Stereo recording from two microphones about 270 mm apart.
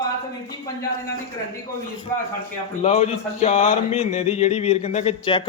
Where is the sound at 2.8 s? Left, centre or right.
Left.